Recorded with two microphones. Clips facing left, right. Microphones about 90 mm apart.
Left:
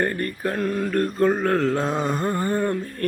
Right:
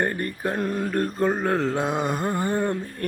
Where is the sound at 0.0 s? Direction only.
20° right (ahead or behind).